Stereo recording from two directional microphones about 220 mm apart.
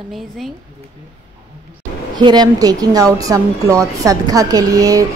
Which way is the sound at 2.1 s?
20° right (ahead or behind).